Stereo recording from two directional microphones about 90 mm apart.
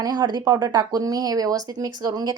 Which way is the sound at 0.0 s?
50° right (ahead or behind).